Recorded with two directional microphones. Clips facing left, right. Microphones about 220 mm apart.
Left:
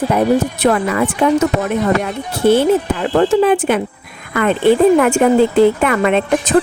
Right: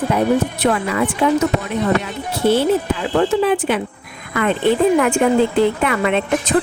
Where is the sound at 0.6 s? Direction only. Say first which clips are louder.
Left 3 dB; 50° left (ahead or behind).